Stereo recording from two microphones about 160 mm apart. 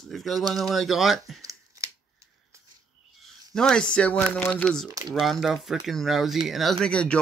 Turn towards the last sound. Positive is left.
turn(degrees=5)  # may be behind; listen again after turning